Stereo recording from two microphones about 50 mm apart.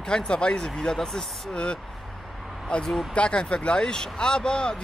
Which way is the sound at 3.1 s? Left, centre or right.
Left.